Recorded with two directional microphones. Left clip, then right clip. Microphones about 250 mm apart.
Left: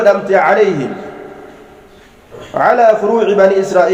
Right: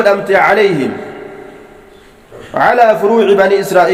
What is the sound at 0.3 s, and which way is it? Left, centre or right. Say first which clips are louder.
Speech: right 1 dB; right.